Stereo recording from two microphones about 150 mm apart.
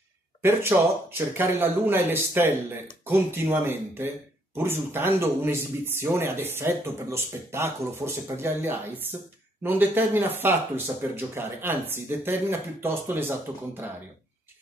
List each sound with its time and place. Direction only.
0.4 s speech: 15° right (ahead or behind)